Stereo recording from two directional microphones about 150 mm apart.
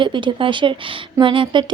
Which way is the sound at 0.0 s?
30° right (ahead or behind).